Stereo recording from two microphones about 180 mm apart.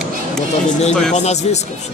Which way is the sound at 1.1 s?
40° left (ahead or behind).